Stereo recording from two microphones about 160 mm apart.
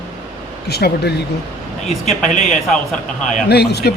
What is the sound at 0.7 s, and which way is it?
Speech, 90° left.